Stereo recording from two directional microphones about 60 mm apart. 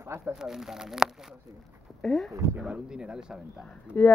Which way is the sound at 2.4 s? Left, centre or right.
Right.